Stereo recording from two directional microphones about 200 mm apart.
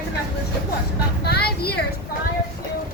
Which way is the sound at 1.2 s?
55° left (ahead or behind).